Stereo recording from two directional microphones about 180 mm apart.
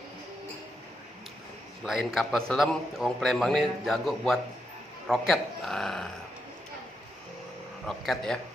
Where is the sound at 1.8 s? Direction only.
Centre (ahead or behind).